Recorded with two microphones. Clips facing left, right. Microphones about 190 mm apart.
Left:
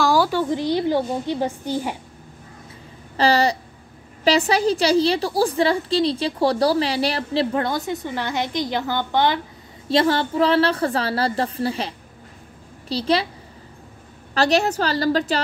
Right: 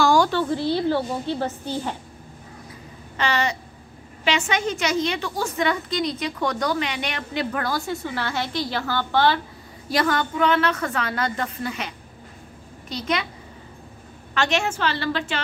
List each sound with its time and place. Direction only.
0.0 s a woman's voice: 5° left (ahead or behind)
3.2 s a woman's voice: 35° left (ahead or behind); by 9.4 s 20° left (ahead or behind)
9.8 s a woman's voice: 30° left (ahead or behind)
14.3 s a woman's voice: 35° left (ahead or behind)